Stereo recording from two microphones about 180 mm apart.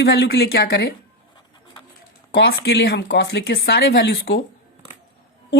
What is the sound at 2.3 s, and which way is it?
Speech, 65° left (ahead or behind).